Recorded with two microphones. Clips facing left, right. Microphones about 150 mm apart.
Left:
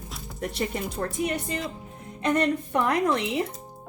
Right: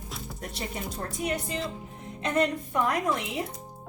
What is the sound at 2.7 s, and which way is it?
Speech, 75° left (ahead or behind).